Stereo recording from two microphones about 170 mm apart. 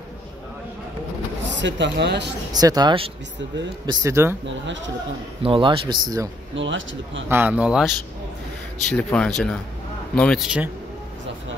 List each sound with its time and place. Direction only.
1.5 s speech: 90° right
2.5 s speech: 25° right (ahead or behind)
5.4 s speech: 30° right (ahead or behind)
6.5 s speech: 90° right
7.2 s speech: 10° right (ahead or behind)
8.8 s speech: 5° left (ahead or behind)